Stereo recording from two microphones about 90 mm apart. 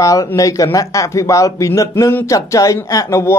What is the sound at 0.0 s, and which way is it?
Speech, 40° left (ahead or behind).